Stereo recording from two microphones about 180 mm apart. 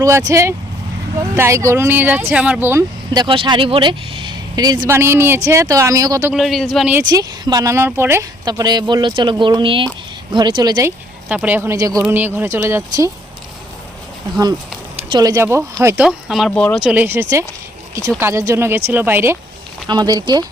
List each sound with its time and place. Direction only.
0.0 s speech: 20° right (ahead or behind)
3.1 s speech: 25° right (ahead or behind)
6.3 s speech: centre (ahead or behind)
7.0 s speech: 20° right (ahead or behind)
14.9 s speech: 25° right (ahead or behind)
16.0 s speech: centre (ahead or behind)
19.9 s speech: 25° right (ahead or behind)